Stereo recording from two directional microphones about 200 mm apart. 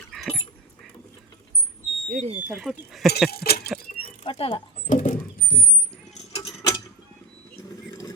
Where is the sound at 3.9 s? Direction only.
30° left (ahead or behind).